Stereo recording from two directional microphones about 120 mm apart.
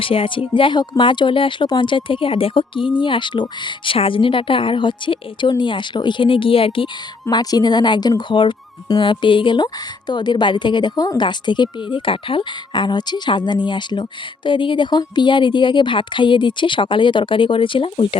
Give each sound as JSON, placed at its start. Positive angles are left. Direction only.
{"t": 0.0, "sound": "a woman's voice", "side_deg": 50}
{"t": 7.3, "sound": "a woman's voice", "side_deg": 35}